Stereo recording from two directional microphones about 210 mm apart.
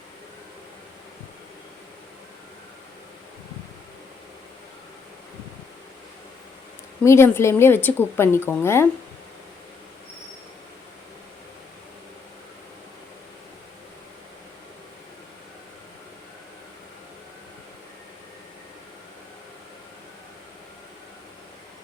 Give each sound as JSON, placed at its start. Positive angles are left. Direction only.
{"t": 7.0, "sound": "a woman's voice", "side_deg": 15}